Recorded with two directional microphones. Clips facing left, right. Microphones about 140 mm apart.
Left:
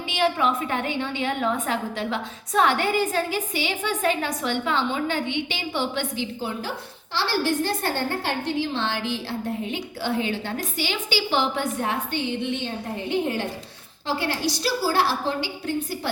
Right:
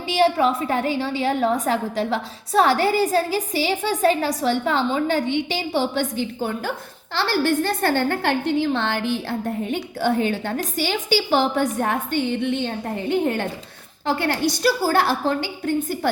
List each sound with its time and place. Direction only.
0.1 s a woman's voice: 35° right (ahead or behind)
7.1 s a woman's voice: 55° right (ahead or behind)